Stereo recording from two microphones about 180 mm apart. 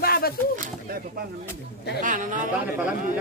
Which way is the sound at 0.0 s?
60° left (ahead or behind).